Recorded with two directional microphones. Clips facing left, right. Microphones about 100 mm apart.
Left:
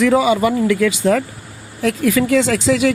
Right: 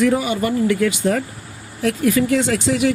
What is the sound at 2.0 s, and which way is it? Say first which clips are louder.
Speech: left 2 dB; 90° left.